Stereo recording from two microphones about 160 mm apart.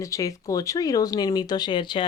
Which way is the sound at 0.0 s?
20° left (ahead or behind).